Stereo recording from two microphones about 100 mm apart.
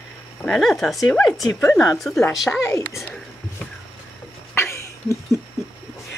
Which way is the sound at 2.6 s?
30° left (ahead or behind).